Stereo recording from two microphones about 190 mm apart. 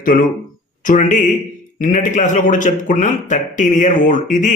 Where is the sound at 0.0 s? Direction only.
45° left (ahead or behind).